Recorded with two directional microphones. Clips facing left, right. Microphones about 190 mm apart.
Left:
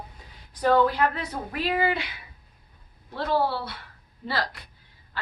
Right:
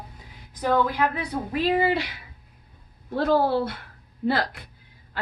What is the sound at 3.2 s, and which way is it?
Speech, 45° right (ahead or behind).